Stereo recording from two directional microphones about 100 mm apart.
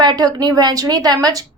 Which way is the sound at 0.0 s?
45° right (ahead or behind).